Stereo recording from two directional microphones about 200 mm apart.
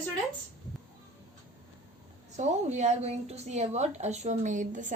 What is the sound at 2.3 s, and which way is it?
A woman's voice, 35° right (ahead or behind).